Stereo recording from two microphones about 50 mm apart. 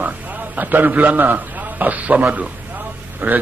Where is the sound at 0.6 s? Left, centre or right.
Right.